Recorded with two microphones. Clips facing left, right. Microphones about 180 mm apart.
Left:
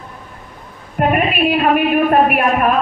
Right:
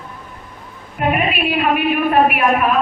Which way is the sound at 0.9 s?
45° left (ahead or behind).